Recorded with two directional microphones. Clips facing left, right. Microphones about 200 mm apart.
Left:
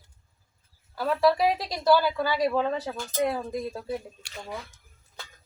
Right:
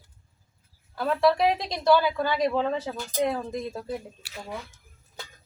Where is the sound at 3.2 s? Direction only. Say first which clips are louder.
Even; 5° left (ahead or behind).